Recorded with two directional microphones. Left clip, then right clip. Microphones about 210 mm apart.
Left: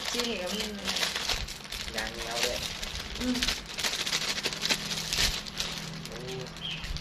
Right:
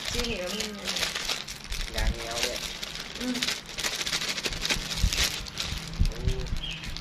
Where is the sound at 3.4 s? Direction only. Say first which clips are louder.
Right 1 dB; 10° right (ahead or behind).